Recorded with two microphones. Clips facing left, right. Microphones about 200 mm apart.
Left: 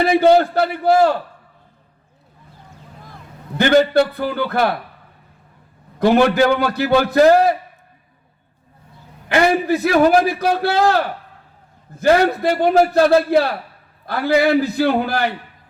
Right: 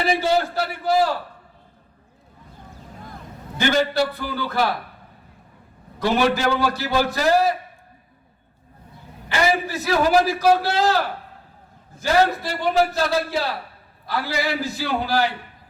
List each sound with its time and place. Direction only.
0.0 s a man's voice: 55° left (ahead or behind)
3.6 s a man's voice: 55° left (ahead or behind)
6.1 s a man's voice: 60° left (ahead or behind)
9.3 s a man's voice: 60° left (ahead or behind)
11.9 s a man's voice: 60° left (ahead or behind)